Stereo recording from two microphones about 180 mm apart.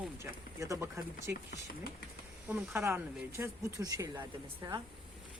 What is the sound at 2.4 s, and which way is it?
Speech, 10° right (ahead or behind).